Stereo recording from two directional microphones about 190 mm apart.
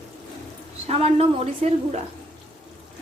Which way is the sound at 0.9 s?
30° right (ahead or behind).